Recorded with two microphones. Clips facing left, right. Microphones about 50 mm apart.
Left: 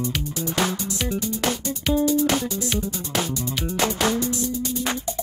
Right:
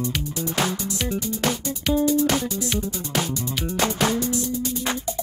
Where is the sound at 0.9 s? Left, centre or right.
Centre.